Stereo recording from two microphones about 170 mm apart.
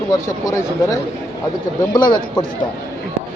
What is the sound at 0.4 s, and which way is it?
Speech, 20° left (ahead or behind).